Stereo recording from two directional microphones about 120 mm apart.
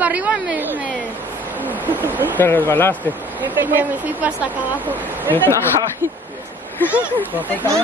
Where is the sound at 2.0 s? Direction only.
15° right (ahead or behind).